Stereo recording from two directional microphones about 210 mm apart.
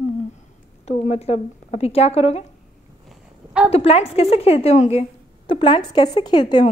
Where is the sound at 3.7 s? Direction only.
30° left (ahead or behind).